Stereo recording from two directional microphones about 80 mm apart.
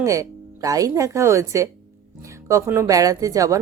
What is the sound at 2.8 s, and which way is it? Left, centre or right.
Speech, right.